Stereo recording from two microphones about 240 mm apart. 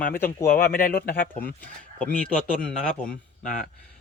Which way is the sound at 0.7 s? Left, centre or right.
Left.